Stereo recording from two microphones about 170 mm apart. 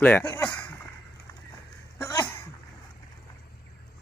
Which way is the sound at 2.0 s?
15° left (ahead or behind).